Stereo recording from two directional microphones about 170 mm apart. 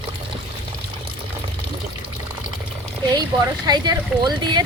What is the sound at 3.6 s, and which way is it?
Speech, 25° right (ahead or behind).